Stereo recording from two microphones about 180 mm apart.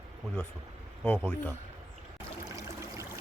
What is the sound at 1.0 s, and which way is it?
Speech, 5° left (ahead or behind).